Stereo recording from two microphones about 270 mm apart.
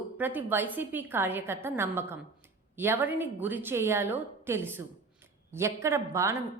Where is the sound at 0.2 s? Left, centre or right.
Centre.